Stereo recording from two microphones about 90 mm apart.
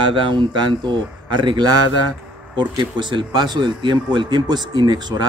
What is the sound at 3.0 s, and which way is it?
A man's voice, 60° right (ahead or behind).